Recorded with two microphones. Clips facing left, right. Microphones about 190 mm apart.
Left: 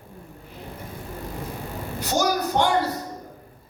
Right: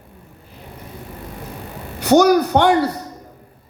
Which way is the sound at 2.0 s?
65° right (ahead or behind).